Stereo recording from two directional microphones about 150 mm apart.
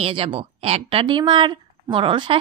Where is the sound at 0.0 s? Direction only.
35° right (ahead or behind).